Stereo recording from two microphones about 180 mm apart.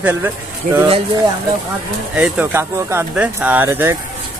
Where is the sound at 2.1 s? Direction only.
10° right (ahead or behind).